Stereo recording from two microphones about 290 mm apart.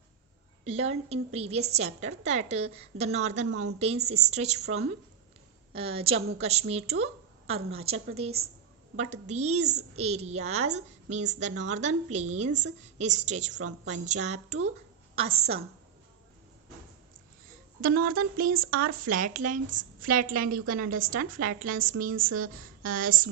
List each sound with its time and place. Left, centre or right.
0.6 s speech: right
3.5 s a woman's voice: right
4.0 s speech: right
13.5 s a woman's voice: right
13.8 s speech: right
17.7 s speech: right